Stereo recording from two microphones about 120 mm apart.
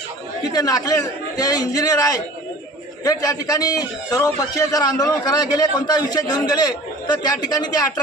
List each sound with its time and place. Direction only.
0.5 s a man's voice: 30° left (ahead or behind)